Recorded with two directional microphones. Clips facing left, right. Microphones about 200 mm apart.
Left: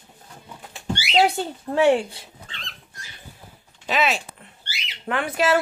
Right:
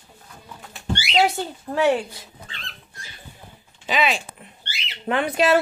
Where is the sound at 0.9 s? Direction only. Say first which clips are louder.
Left 1 dB; 5° left (ahead or behind).